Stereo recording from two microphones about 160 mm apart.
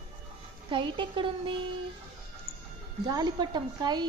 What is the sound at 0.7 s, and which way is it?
Speech, 30° right (ahead or behind).